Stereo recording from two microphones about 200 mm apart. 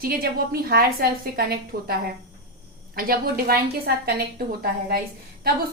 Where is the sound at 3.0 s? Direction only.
50° right (ahead or behind).